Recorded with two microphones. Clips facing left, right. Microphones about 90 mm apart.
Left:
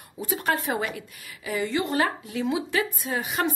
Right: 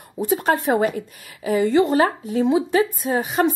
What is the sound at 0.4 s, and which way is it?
A woman's voice, 35° right (ahead or behind).